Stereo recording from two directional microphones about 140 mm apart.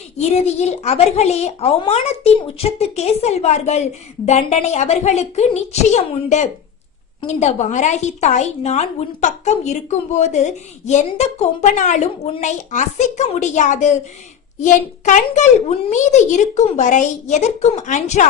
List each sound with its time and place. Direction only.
0.2 s a woman's voice: 50° left (ahead or behind)